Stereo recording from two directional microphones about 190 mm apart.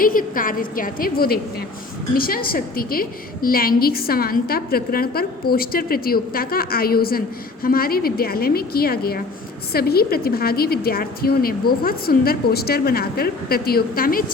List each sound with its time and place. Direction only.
0.0 s a woman's voice: 45° left (ahead or behind)